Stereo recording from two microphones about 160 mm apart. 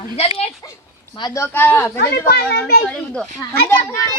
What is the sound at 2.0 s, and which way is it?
Speech, 85° left.